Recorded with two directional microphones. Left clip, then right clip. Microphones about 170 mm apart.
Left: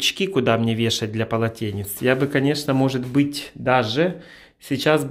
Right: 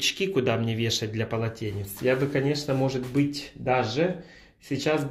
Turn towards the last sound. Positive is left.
turn(degrees=55)  # may be behind; listen again after turning